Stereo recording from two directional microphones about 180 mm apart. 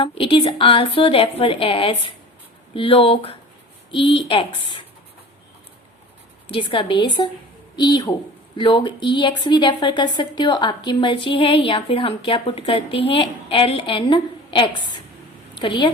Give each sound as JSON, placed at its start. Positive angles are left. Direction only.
{"t": 0.0, "sound": "speech", "side_deg": 30}
{"t": 6.5, "sound": "a woman's voice", "side_deg": 30}